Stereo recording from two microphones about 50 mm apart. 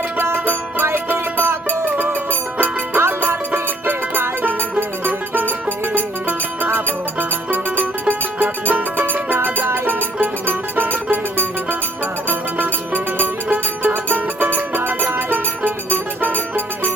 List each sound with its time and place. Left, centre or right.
0.2 s music: right